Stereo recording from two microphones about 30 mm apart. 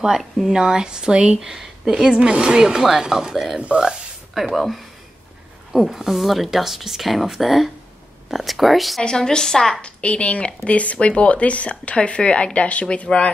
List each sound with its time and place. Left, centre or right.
0.5 s a woman's voice: right
1.4 s a woman's voice: centre
4.3 s speech: centre
9.1 s a woman's voice: centre
9.8 s a woman's voice: left
12.5 s speech: left
13.1 s a woman's voice: centre